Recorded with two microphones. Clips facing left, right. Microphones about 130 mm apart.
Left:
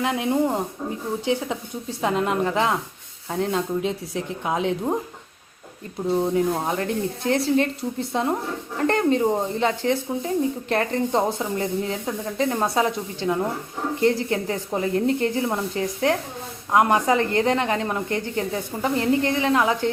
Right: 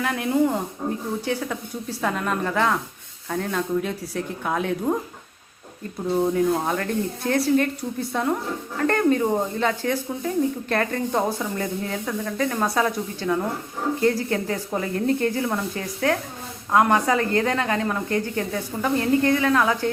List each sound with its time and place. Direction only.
0.0 s speech: 20° left (ahead or behind)
6.3 s speech: 25° left (ahead or behind)